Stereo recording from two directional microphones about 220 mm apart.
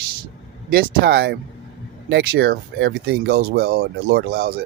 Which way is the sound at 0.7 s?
45° right (ahead or behind).